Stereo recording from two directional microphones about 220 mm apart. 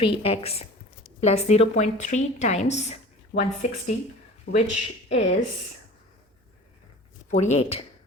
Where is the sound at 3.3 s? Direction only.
45° left (ahead or behind).